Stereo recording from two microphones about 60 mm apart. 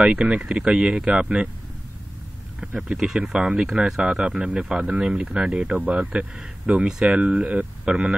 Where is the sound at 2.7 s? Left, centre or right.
Centre.